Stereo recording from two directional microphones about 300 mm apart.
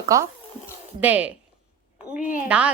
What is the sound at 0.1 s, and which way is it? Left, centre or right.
Speech, centre.